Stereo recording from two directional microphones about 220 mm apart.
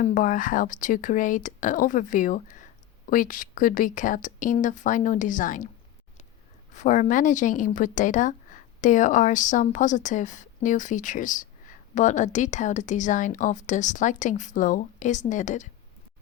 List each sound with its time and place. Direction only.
0.0 s a woman's voice: 35° left (ahead or behind)
6.7 s a woman's voice: 35° left (ahead or behind)